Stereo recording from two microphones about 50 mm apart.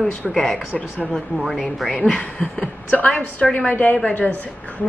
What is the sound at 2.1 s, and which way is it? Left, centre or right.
Speech, left.